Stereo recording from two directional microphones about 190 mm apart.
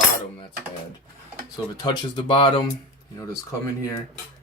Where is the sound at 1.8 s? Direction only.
25° left (ahead or behind).